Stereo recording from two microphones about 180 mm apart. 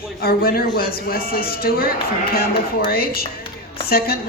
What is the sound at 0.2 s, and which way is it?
A woman's voice, 55° left (ahead or behind).